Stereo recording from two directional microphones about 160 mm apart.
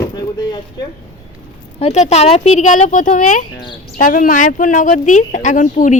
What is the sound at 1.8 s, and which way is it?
Speech, 45° left (ahead or behind).